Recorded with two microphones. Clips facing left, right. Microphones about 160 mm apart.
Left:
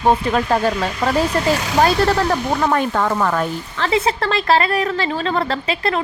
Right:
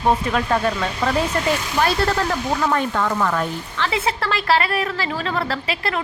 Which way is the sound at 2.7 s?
45° left (ahead or behind).